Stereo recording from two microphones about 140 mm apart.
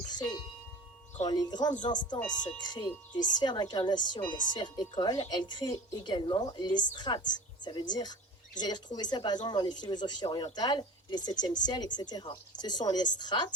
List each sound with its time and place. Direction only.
0.1 s music: 30° left (ahead or behind)
1.2 s speech: 25° left (ahead or behind)